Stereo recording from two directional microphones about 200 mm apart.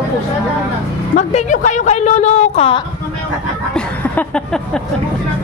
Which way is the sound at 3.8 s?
5° left (ahead or behind).